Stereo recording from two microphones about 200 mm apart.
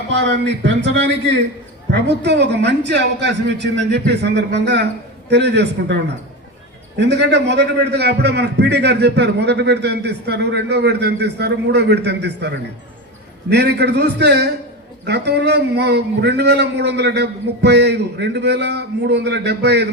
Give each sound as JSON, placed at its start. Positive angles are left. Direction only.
{"t": 0.3, "sound": "a man's voice", "side_deg": -60}